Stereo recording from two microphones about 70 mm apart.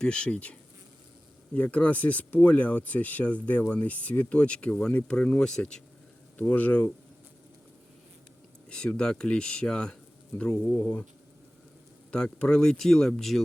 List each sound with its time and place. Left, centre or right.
0.0 s speech: centre
1.5 s speech: centre
6.5 s speech: left
8.7 s speech: centre
10.7 s speech: left
12.1 s speech: centre